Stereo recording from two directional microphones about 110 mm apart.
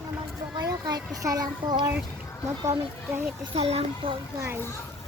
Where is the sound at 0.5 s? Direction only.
40° right (ahead or behind).